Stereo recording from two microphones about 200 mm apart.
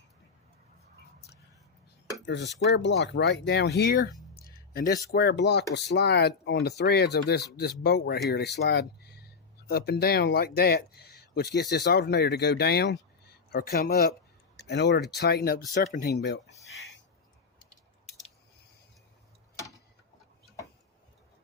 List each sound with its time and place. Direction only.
2.2 s speech: 60° left (ahead or behind)
4.4 s music: 50° left (ahead or behind)
5.1 s speech: 55° left (ahead or behind)